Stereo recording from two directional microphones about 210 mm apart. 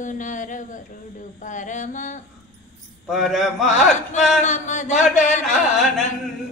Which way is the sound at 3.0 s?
Centre (ahead or behind).